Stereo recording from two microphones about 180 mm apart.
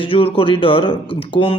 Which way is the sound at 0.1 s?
30° left (ahead or behind).